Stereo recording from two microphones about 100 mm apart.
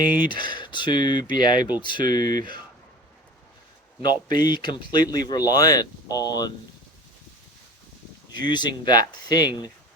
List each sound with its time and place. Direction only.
0.1 s speech: 50° left (ahead or behind)
4.0 s speech: 45° left (ahead or behind)
8.3 s speech: 45° left (ahead or behind)